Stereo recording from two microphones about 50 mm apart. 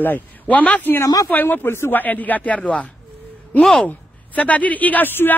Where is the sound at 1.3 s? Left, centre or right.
Left.